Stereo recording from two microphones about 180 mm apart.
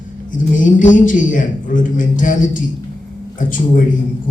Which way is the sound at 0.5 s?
45° left (ahead or behind).